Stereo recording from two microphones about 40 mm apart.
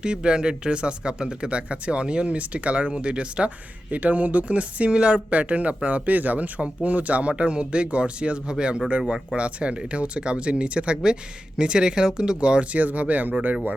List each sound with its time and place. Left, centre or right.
0.0 s speech: right